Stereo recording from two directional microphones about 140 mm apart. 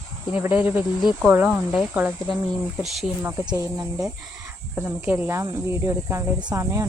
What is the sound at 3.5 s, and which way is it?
Speech, 25° right (ahead or behind).